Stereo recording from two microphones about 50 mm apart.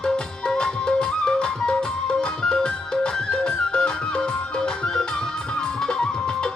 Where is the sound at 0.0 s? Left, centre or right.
Centre.